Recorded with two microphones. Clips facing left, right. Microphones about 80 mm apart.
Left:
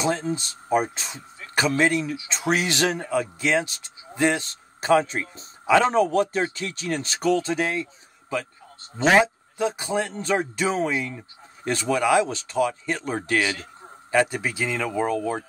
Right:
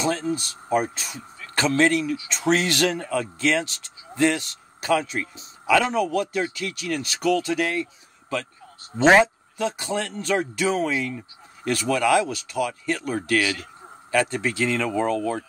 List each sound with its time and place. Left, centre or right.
0.0 s a man's voice: left